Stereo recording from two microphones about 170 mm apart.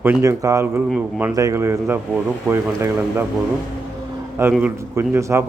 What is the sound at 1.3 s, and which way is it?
A man's voice, 20° right (ahead or behind).